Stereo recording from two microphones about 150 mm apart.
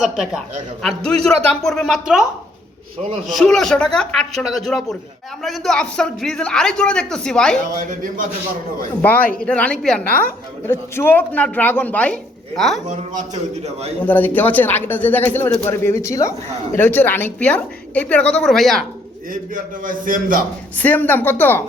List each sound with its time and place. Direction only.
0.8 s a man's voice: 5° left (ahead or behind)
3.2 s a man's voice: centre (ahead or behind)
7.8 s a man's voice: 65° right (ahead or behind)
9.0 s speech: 10° left (ahead or behind)
14.0 s speech: 10° left (ahead or behind)
19.3 s a man's voice: 65° right (ahead or behind)
20.7 s speech: 10° left (ahead or behind)